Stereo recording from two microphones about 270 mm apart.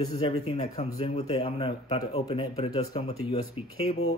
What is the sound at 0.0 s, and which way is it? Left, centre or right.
Speech, centre.